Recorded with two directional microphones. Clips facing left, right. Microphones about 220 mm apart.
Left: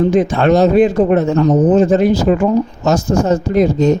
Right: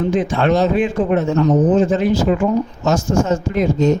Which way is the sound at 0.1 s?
40° left (ahead or behind).